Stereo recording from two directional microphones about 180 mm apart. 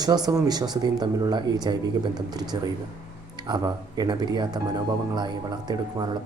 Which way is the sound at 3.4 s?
25° right (ahead or behind).